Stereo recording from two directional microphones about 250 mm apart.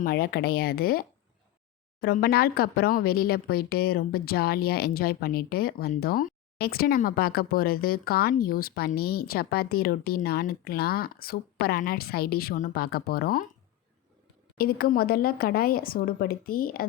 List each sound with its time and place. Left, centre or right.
0.0 s speech: left
14.6 s speech: left